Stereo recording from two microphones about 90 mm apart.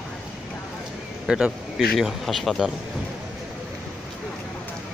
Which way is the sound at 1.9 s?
Centre (ahead or behind).